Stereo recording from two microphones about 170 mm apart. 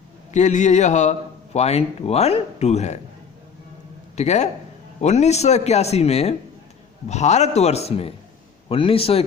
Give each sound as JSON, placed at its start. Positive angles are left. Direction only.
{"t": 0.3, "sound": "speech", "side_deg": 45}
{"t": 4.1, "sound": "speech", "side_deg": 40}